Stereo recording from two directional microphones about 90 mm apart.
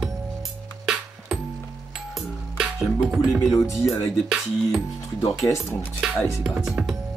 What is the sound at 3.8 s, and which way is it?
Speech, 30° left (ahead or behind).